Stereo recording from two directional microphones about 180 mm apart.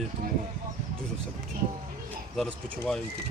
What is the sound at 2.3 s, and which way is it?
Speech, 5° left (ahead or behind).